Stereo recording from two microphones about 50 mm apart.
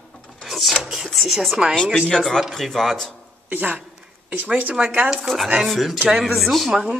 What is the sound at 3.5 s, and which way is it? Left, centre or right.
Speech, right.